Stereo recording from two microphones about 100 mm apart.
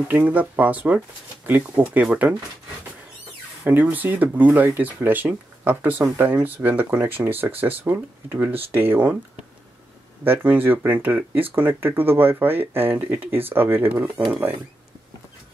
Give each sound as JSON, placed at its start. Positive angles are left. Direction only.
{"t": 0.1, "sound": "speech", "side_deg": -15}
{"t": 3.6, "sound": "speech", "side_deg": -20}
{"t": 10.2, "sound": "speech", "side_deg": -20}